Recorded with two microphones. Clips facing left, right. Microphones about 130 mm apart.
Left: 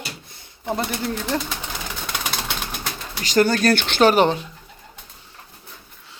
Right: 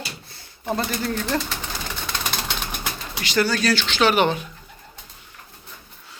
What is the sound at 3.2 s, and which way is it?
Speech, 45° left (ahead or behind).